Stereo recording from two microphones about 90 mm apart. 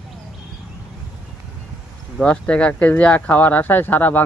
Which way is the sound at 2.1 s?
10° left (ahead or behind).